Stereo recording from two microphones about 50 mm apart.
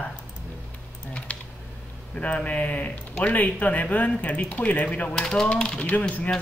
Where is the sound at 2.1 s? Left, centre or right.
Left.